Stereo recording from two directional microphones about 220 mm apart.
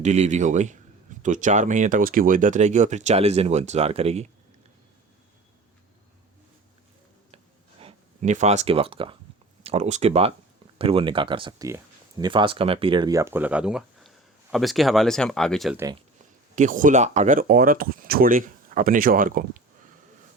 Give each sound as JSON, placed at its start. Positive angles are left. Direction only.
{"t": 0.0, "sound": "speech", "side_deg": -30}
{"t": 7.8, "sound": "speech", "side_deg": -30}
{"t": 16.6, "sound": "speech", "side_deg": -35}